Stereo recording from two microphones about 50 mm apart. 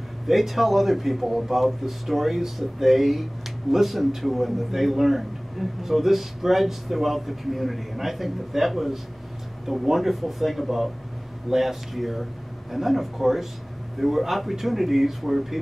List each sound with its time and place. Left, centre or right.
0.3 s a man's voice: centre